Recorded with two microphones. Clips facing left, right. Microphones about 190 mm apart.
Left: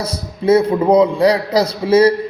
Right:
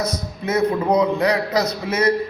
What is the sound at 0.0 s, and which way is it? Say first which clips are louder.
A man's voice: left 5 dB; 30° left (ahead or behind).